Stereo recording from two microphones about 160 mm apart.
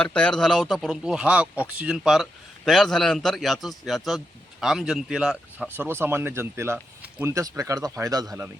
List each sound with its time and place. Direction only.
0.0 s a man's voice: 5° left (ahead or behind); by 8.4 s 20° right (ahead or behind)